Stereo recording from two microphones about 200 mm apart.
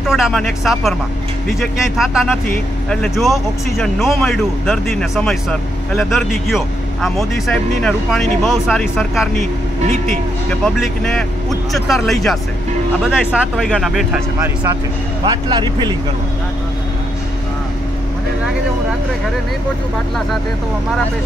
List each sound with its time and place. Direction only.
0.0 s speech: centre (ahead or behind)
10.6 s speech: centre (ahead or behind)
15.2 s speech: 20° right (ahead or behind)